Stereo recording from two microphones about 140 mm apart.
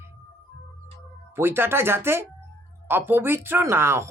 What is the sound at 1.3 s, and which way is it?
Speech, 15° right (ahead or behind).